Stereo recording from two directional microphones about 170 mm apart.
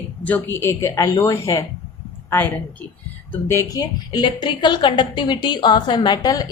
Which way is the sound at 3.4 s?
15° left (ahead or behind).